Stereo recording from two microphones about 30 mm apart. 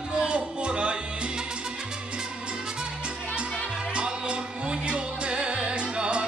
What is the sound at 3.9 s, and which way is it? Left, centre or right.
Music, right.